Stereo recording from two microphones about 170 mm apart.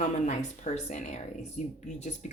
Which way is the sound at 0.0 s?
45° left (ahead or behind).